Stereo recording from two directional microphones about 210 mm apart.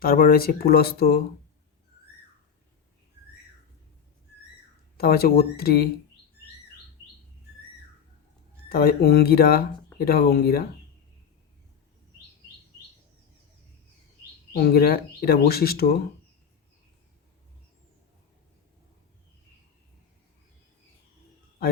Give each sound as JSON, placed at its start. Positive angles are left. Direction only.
{"t": 0.0, "sound": "speech", "side_deg": 45}
{"t": 4.9, "sound": "speech", "side_deg": 45}
{"t": 8.7, "sound": "speech", "side_deg": 45}
{"t": 14.5, "sound": "speech", "side_deg": 50}